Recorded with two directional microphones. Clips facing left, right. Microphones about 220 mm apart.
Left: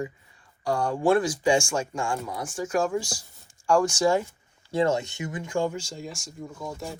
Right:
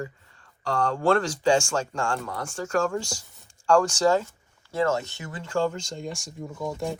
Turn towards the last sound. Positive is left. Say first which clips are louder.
# right 4 dB
turn(degrees=0)  # may be behind; listen again after turning